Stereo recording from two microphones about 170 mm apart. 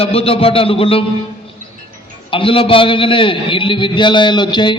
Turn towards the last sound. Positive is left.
turn(degrees=25)  # may be behind; listen again after turning